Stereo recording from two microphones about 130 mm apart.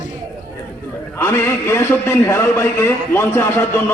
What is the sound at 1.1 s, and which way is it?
A man's voice, 20° left (ahead or behind).